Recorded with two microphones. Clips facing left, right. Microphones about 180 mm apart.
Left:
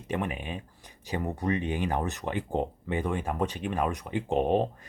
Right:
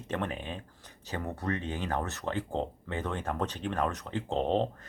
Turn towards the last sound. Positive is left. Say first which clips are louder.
# left 3 dB
turn(degrees=15)  # may be behind; listen again after turning